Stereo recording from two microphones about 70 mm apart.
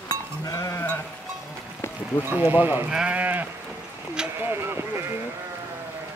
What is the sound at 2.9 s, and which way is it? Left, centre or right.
Sheep, centre.